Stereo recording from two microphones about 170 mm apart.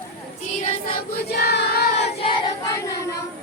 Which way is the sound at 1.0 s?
70° left (ahead or behind).